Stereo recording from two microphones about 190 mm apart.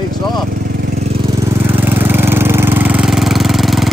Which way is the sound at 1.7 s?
10° right (ahead or behind).